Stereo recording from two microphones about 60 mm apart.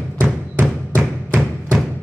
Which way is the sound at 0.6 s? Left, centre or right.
Right.